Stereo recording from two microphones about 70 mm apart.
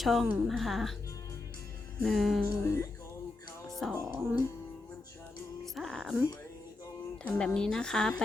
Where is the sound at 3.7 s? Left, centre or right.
Centre.